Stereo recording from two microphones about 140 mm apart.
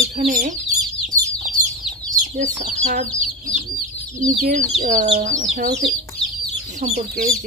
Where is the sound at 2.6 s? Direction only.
70° right (ahead or behind).